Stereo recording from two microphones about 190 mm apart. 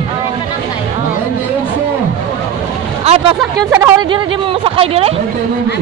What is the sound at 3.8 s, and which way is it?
Speech, 25° right (ahead or behind).